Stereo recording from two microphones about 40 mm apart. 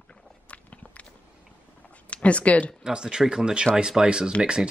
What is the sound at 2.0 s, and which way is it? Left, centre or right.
Speech, left.